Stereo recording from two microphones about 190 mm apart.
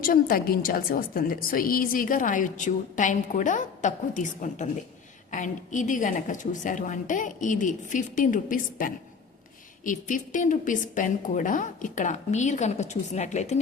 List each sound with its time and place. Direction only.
0.0 s a woman's voice: 50° left (ahead or behind)